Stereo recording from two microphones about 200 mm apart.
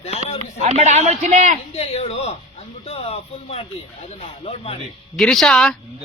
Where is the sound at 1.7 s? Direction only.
30° left (ahead or behind).